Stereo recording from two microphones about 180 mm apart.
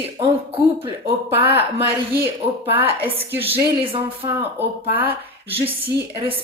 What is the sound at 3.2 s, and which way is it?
A woman's voice, 10° right (ahead or behind).